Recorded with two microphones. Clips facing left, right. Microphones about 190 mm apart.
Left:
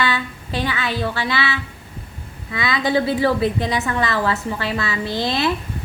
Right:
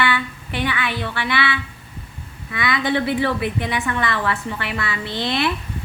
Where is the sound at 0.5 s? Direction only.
35° left (ahead or behind).